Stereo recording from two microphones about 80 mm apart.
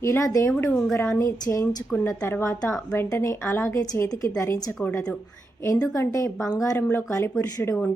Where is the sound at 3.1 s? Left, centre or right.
Left.